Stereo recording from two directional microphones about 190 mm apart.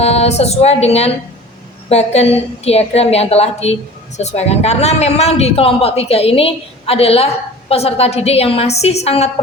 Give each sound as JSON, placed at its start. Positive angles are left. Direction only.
{"t": 0.0, "sound": "a woman's voice", "side_deg": 35}